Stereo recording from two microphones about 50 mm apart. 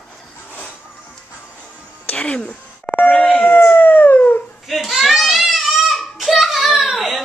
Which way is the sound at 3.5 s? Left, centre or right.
Left.